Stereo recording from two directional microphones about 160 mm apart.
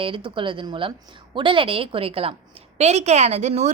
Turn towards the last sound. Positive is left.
turn(degrees=-45)  # may be behind; listen again after turning